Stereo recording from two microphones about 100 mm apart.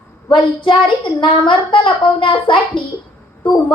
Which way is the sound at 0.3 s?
55° left (ahead or behind).